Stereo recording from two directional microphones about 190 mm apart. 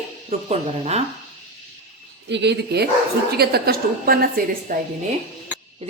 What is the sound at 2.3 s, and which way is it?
A woman's voice, 65° right (ahead or behind).